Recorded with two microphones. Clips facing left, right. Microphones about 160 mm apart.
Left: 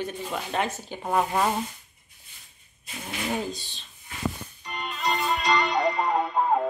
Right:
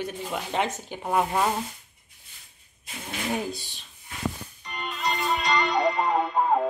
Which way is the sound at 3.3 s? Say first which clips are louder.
Right 1 dB; 10° right (ahead or behind).